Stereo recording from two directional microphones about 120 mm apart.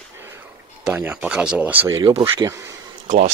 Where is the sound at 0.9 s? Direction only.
10° right (ahead or behind).